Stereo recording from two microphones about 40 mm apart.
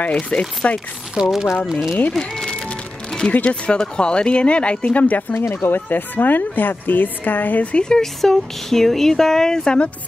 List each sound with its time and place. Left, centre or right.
0.0 s chopping: left
1.2 s speech: right
1.7 s speech: centre
2.1 s speech: centre; by 5.2 s left
5.3 s speech: left
7.7 s speech: left
8.0 s speech: centre